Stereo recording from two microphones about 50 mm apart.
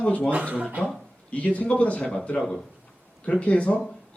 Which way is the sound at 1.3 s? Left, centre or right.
Left.